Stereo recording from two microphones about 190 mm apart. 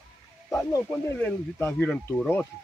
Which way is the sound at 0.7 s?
10° left (ahead or behind).